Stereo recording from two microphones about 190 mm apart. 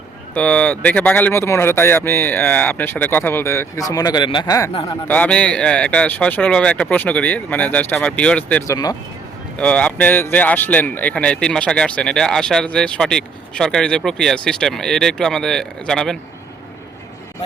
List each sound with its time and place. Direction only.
0.3 s speech: 5° left (ahead or behind)
5.0 s speech: 10° left (ahead or behind)
9.6 s speech: 5° left (ahead or behind)